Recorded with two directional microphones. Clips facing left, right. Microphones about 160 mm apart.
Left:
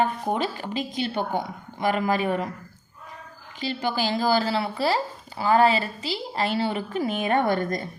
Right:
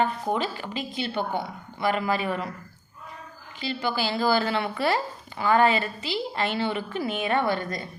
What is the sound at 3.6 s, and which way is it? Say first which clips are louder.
Speech: left 1 dB; 40° left (ahead or behind).